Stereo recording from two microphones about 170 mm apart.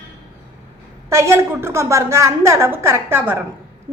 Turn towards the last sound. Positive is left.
turn(degrees=-15)  # may be behind; listen again after turning